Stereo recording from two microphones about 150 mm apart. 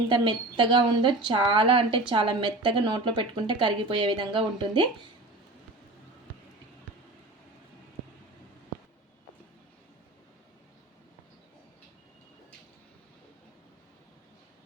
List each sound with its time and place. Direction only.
0.1 s a woman's voice: 30° right (ahead or behind)